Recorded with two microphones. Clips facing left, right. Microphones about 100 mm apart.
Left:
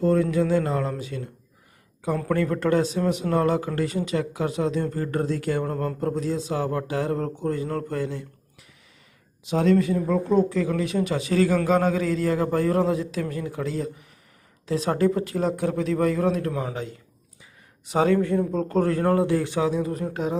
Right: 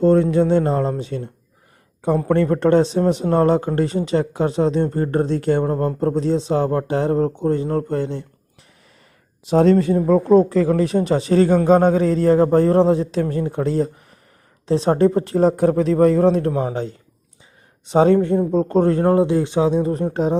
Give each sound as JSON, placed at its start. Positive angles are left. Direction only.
{"t": 0.0, "sound": "a man's voice", "side_deg": -30}
{"t": 9.5, "sound": "a man's voice", "side_deg": -35}